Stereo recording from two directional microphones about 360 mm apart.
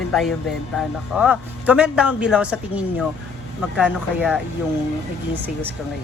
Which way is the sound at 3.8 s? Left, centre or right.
Centre.